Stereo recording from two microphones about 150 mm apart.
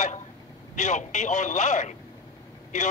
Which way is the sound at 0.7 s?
55° left (ahead or behind).